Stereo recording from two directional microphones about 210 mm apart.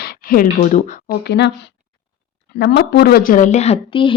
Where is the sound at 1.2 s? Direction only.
55° left (ahead or behind).